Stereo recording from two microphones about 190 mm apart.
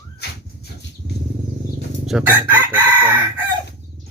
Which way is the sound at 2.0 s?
5° right (ahead or behind).